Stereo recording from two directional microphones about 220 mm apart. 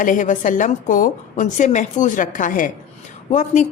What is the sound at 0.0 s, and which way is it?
A woman's voice, 35° left (ahead or behind).